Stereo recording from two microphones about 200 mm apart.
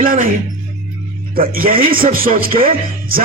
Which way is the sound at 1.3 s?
45° right (ahead or behind).